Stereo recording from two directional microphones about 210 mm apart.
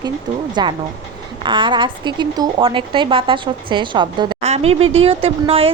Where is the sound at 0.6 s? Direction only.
20° right (ahead or behind).